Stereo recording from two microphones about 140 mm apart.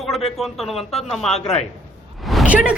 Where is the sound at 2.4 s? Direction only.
10° right (ahead or behind).